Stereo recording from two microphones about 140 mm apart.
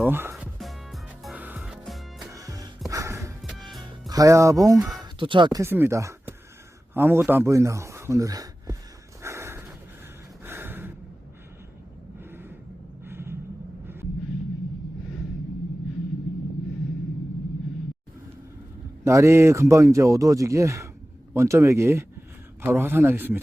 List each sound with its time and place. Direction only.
0.0 s speech: 15° right (ahead or behind)
0.3 s music: centre (ahead or behind)
1.4 s music: 10° right (ahead or behind)
2.3 s music: 25° right (ahead or behind)
4.1 s speech: 25° right (ahead or behind)
4.8 s a sound: centre (ahead or behind)
5.2 s speech: 35° right (ahead or behind)
5.6 s speech: 15° right (ahead or behind)
9.2 s snort: 20° right (ahead or behind)
10.4 s gasp: 15° right (ahead or behind)
13.1 s a sound: 15° right (ahead or behind)
19.0 s a man's voice: 20° right (ahead or behind)